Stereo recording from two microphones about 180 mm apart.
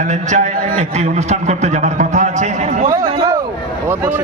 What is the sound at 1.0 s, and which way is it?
A man's voice, 40° right (ahead or behind).